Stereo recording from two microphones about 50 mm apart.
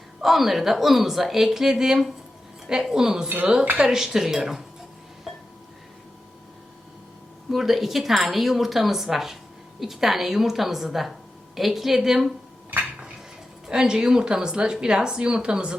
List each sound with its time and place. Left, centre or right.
0.2 s speech: centre
5.3 s a sound: centre
7.5 s speech: centre
13.7 s speech: centre